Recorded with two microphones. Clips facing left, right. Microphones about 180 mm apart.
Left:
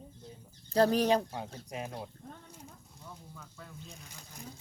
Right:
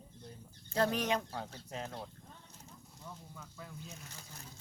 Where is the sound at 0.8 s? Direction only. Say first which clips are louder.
Left 7 dB; 35° left (ahead or behind).